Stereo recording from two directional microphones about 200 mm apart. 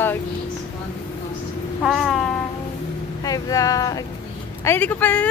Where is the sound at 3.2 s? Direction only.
15° left (ahead or behind).